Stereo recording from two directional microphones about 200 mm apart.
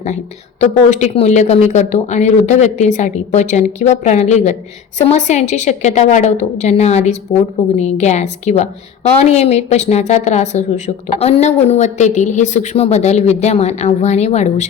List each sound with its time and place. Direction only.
0.6 s a woman's voice: 35° left (ahead or behind)